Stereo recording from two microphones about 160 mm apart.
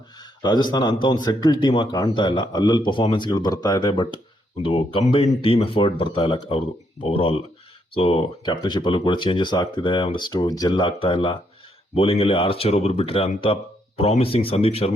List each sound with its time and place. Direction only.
0.2 s a man's voice: 25° left (ahead or behind)